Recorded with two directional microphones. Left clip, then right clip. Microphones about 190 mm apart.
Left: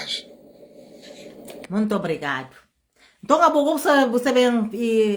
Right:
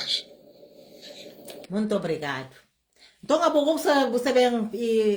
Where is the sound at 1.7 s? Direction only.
25° left (ahead or behind).